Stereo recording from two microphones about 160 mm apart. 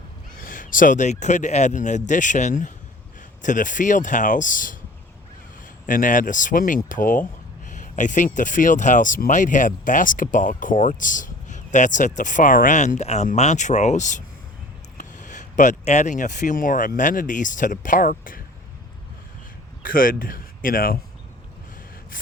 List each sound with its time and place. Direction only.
0.3 s speech: 60° left (ahead or behind)
5.8 s speech: 55° left (ahead or behind)
19.8 s speech: 60° left (ahead or behind)